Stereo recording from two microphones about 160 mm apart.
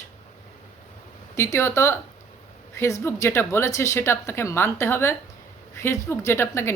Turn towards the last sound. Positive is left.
turn(degrees=15)  # may be behind; listen again after turning